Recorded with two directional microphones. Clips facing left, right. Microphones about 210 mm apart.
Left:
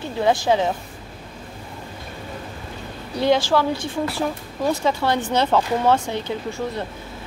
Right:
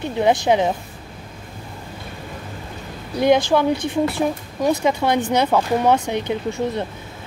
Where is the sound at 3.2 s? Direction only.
15° right (ahead or behind).